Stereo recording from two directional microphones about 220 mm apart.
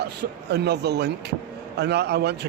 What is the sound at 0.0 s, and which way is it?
Speech, 50° right (ahead or behind).